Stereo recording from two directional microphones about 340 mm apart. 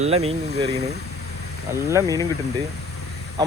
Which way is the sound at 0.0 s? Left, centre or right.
Centre.